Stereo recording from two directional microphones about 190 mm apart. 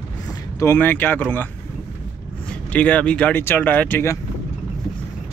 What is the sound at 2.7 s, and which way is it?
Speech, 5° left (ahead or behind).